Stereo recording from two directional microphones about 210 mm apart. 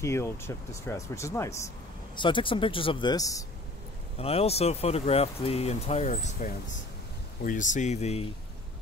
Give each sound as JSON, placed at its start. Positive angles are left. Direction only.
{"t": 0.0, "sound": "speech", "side_deg": 15}
{"t": 4.2, "sound": "speech", "side_deg": 30}